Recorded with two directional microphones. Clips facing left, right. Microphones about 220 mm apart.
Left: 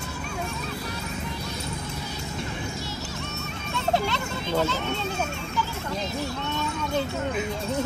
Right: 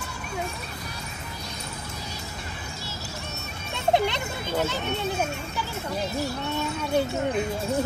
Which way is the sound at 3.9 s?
20° right (ahead or behind).